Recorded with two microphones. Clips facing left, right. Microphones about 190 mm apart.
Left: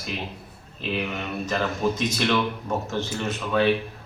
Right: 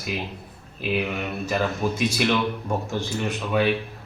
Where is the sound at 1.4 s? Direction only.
10° right (ahead or behind).